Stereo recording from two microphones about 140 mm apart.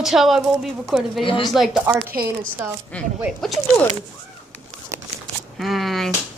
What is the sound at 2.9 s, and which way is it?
Speech, 10° left (ahead or behind).